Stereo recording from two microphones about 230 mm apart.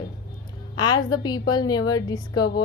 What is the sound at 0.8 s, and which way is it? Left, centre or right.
A woman's voice, centre.